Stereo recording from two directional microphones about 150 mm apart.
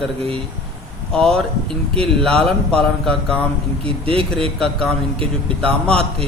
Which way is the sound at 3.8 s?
40° right (ahead or behind).